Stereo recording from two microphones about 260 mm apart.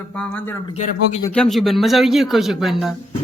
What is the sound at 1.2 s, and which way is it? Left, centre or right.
A man's voice, centre.